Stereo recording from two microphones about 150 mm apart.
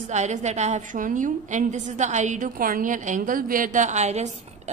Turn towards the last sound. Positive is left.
turn(degrees=-50)  # may be behind; listen again after turning